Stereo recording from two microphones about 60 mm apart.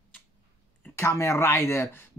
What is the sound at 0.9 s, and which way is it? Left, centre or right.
Speech, left.